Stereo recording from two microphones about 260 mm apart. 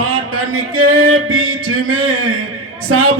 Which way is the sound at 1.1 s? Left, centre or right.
Right.